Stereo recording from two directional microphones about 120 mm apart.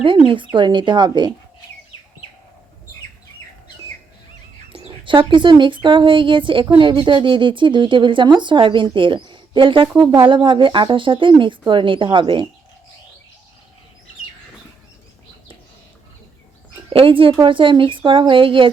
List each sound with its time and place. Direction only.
0.0 s speech: 45° right (ahead or behind)
4.7 s speech: 50° right (ahead or behind)
16.9 s speech: 50° right (ahead or behind)